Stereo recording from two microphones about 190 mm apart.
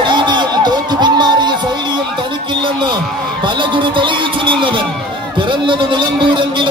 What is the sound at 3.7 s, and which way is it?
Speech, 25° right (ahead or behind).